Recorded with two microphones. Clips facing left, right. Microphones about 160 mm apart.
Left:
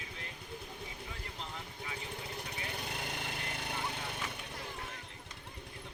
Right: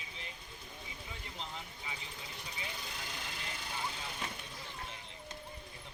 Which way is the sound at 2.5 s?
60° left (ahead or behind).